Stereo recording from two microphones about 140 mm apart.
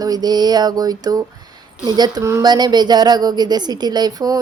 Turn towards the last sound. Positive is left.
turn(degrees=-25)  # may be behind; listen again after turning